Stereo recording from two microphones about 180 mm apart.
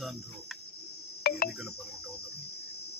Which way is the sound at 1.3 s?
55° left (ahead or behind).